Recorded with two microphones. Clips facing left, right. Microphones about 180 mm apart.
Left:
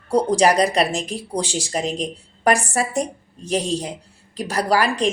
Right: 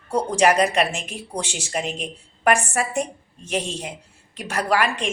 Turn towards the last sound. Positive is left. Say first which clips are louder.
# left 3 dB
turn(degrees=35)  # may be behind; listen again after turning